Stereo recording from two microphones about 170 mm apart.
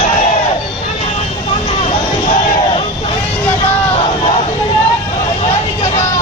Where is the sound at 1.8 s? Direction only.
35° left (ahead or behind).